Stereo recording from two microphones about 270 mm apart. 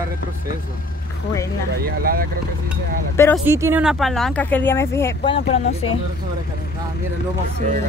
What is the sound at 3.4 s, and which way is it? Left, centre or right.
Speech, centre.